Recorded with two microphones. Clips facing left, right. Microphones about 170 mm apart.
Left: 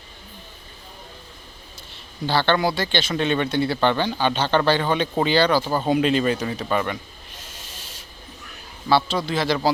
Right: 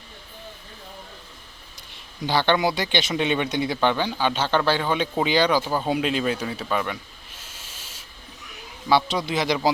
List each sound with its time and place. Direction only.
2.2 s a man's voice: 15° right (ahead or behind)